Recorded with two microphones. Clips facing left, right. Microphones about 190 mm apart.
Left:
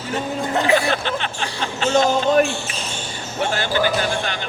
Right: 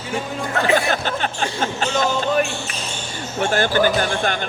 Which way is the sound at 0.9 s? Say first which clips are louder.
Even; 45° right (ahead or behind).